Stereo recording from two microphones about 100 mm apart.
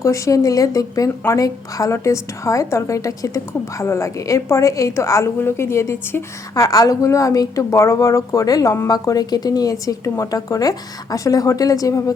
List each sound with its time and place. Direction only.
0.0 s a woman's voice: 35° left (ahead or behind)
6.5 s a woman's voice: 35° left (ahead or behind)